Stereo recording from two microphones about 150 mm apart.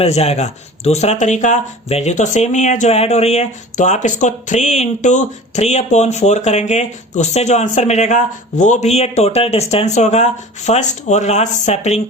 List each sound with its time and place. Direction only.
0.0 s speech: 45° left (ahead or behind)